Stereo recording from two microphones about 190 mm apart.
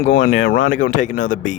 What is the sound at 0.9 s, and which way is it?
Speech, 45° left (ahead or behind).